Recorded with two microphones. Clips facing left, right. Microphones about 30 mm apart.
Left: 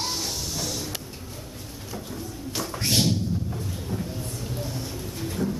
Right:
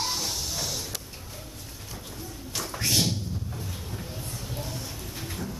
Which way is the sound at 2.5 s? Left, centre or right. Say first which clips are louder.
Left 2 dB; centre.